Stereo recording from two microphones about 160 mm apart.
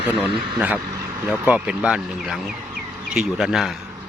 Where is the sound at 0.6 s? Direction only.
10° right (ahead or behind).